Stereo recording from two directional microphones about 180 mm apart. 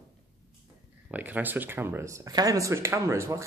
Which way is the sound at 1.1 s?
10° right (ahead or behind).